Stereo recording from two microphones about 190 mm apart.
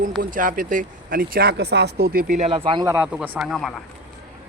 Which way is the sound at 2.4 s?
30° right (ahead or behind).